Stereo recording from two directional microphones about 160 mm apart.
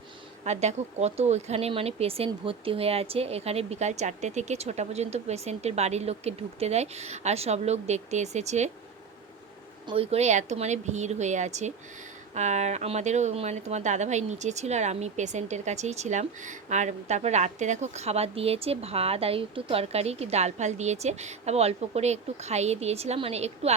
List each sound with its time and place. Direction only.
0.4 s speech: 45° right (ahead or behind)
9.8 s speech: 35° right (ahead or behind)